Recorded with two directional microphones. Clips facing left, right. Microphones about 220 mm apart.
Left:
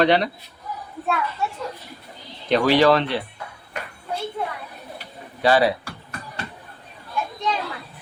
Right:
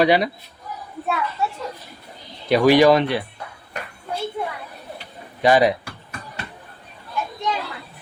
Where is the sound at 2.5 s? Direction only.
10° right (ahead or behind).